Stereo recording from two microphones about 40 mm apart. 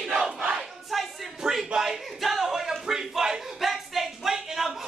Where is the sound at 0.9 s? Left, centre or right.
Centre.